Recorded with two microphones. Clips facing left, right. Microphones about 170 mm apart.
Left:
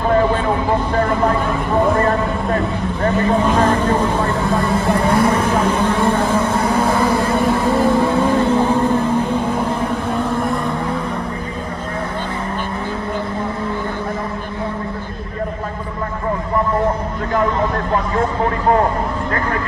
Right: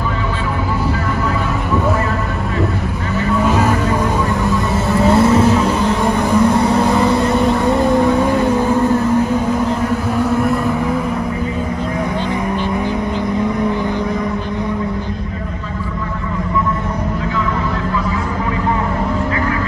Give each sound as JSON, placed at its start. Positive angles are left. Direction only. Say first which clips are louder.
{"t": 3.4, "sound": "vehicle", "louder": "even", "side_deg": -5}
{"t": 5.1, "sound": "vehicle", "louder": "right 5 dB", "side_deg": -25}
{"t": 5.9, "sound": "a sound", "louder": "right 2 dB", "side_deg": -15}
{"t": 8.0, "sound": "vehicle", "louder": "right 2 dB", "side_deg": -15}
{"t": 10.3, "sound": "vehicle", "louder": "right 4 dB", "side_deg": -5}